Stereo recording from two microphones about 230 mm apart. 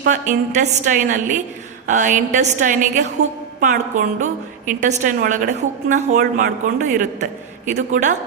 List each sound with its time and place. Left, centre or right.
0.0 s a woman's voice: right